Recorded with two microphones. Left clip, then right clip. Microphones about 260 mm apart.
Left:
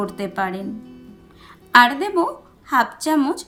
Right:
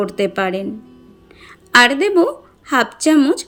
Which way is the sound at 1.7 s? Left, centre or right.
Centre.